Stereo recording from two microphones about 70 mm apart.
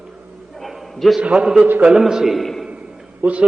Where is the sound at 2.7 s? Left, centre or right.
Centre.